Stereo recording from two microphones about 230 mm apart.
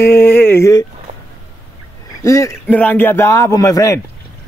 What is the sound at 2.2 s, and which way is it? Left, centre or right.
A man's voice, centre.